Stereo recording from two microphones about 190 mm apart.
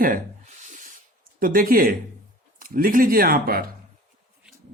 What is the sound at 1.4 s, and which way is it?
Speech, 50° right (ahead or behind).